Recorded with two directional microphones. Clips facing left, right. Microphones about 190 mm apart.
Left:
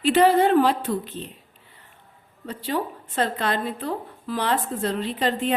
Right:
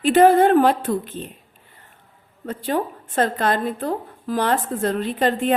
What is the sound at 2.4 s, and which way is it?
A woman's voice, 50° right (ahead or behind).